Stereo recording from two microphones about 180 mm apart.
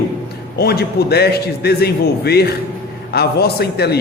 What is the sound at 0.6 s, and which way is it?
Speech, 60° left (ahead or behind).